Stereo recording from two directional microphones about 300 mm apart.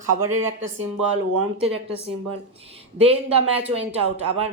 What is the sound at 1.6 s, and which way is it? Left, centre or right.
A woman's voice, centre.